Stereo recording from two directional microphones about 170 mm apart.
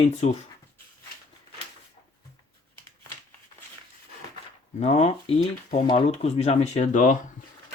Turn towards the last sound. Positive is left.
turn(degrees=45)  # may be behind; listen again after turning